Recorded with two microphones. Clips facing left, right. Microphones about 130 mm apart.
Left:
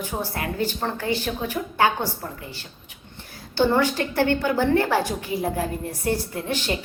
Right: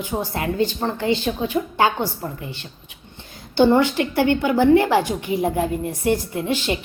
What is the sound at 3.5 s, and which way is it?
A woman's voice, 20° right (ahead or behind).